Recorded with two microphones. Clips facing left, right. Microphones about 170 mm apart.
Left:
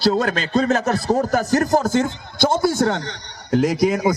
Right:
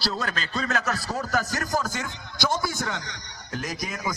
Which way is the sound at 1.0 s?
50° left (ahead or behind).